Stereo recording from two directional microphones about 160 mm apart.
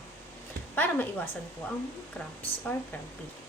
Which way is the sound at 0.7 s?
10° left (ahead or behind).